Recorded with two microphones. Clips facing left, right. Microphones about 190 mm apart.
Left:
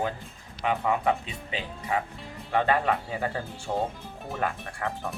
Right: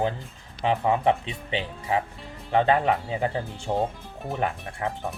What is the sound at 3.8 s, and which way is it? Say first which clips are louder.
Speech: right 3 dB; centre (ahead or behind).